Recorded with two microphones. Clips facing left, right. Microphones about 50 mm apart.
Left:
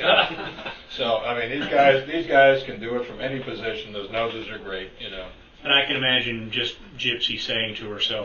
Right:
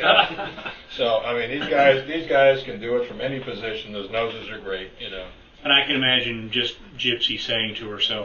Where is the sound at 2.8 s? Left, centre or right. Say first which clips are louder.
Right 3 dB; right.